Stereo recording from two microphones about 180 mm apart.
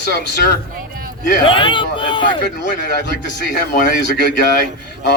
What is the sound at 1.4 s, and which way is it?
Speech, 30° left (ahead or behind).